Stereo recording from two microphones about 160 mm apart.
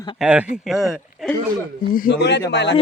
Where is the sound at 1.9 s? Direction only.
75° left (ahead or behind).